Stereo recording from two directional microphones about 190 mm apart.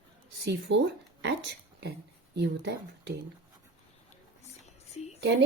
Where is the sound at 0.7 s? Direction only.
70° right (ahead or behind).